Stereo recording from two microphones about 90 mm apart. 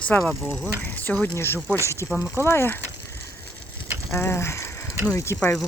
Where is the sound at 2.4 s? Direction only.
30° left (ahead or behind).